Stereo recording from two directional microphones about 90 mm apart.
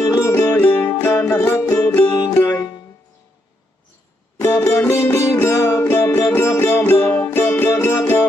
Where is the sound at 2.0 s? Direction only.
50° left (ahead or behind).